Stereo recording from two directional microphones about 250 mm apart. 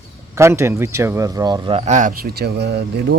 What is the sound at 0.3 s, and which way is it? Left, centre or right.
Speech, centre.